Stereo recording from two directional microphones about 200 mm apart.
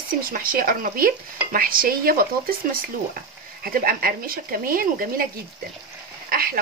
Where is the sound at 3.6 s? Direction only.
45° right (ahead or behind).